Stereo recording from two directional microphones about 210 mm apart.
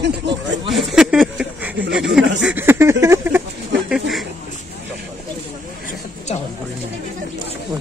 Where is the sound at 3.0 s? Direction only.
10° right (ahead or behind).